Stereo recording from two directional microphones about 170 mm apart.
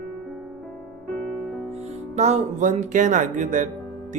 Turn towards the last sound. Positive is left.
turn(degrees=-50)  # may be behind; listen again after turning